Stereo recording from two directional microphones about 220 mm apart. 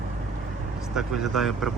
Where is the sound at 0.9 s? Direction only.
Centre (ahead or behind).